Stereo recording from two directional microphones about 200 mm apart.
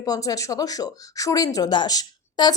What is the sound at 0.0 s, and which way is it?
A woman's voice, 20° left (ahead or behind).